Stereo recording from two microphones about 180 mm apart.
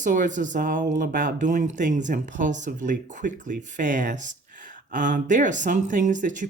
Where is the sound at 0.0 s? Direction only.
45° right (ahead or behind).